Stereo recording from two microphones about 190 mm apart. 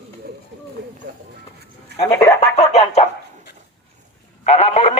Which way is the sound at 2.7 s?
35° left (ahead or behind).